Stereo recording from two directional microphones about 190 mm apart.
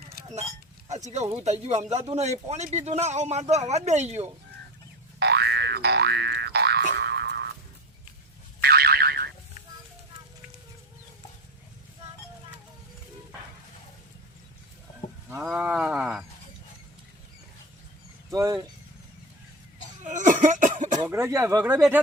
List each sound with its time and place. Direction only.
1.5 s speech: 35° right (ahead or behind)
5.2 s boing: 65° right (ahead or behind)
8.6 s boing: 55° right (ahead or behind)
15.3 s wild animals: 5° right (ahead or behind)
18.3 s a sound: 15° right (ahead or behind)
20.1 s cough: 40° right (ahead or behind)
20.9 s speech: 15° right (ahead or behind)